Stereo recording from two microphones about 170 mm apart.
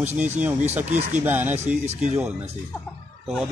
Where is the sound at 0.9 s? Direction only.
45° right (ahead or behind).